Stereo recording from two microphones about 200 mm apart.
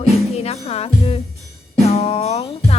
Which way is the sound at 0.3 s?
30° left (ahead or behind).